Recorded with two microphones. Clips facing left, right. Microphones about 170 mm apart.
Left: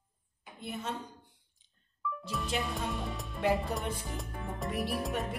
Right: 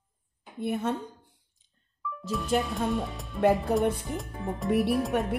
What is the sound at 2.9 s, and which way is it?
Speech, centre (ahead or behind).